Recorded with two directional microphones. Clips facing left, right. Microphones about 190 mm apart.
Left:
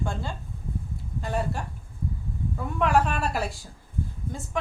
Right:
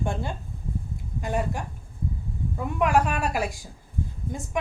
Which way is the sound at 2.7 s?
10° right (ahead or behind).